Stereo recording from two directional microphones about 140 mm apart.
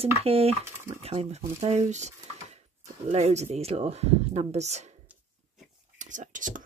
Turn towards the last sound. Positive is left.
turn(degrees=-65)  # may be behind; listen again after turning